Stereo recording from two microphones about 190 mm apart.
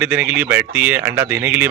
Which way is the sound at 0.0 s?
5° right (ahead or behind).